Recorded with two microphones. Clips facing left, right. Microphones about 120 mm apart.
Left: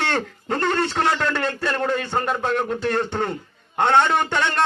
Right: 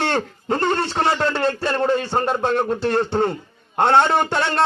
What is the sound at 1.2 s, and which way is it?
A man's voice, 30° right (ahead or behind).